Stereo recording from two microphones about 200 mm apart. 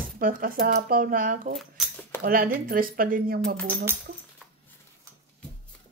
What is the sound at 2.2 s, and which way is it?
Speech, 45° right (ahead or behind).